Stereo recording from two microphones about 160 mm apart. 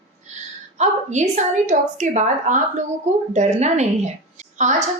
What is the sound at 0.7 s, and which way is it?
A woman's voice, 45° right (ahead or behind).